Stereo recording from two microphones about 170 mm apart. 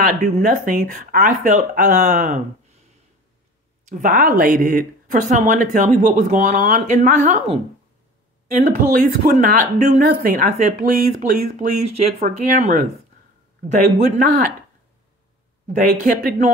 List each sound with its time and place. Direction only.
0.0 s speech: 50° right (ahead or behind)
3.8 s speech: 50° right (ahead or behind)
8.5 s speech: 45° right (ahead or behind)
10.1 s speech: 60° right (ahead or behind)
10.5 s speech: 45° right (ahead or behind)
12.3 s speech: 55° right (ahead or behind)
15.6 s speech: 45° right (ahead or behind)
15.9 s speech: 55° right (ahead or behind)